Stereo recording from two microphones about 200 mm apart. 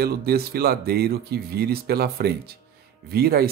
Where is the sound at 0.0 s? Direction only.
50° right (ahead or behind).